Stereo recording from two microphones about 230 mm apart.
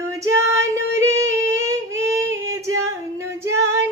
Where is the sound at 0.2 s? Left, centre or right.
Centre.